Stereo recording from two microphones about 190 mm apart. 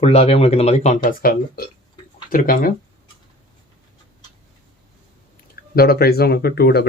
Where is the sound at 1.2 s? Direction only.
50° left (ahead or behind).